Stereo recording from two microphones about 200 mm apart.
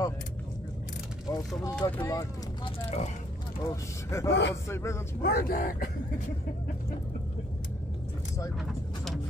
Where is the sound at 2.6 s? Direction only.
30° left (ahead or behind).